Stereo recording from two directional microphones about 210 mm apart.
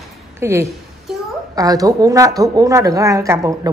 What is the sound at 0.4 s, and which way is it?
A woman's voice, 10° right (ahead or behind).